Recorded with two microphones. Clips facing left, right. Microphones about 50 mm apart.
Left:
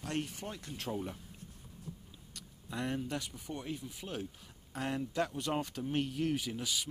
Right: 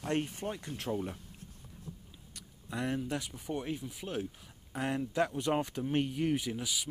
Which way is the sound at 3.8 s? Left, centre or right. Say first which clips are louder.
Right 4 dB; centre.